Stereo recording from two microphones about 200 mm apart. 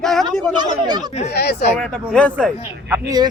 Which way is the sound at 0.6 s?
20° right (ahead or behind).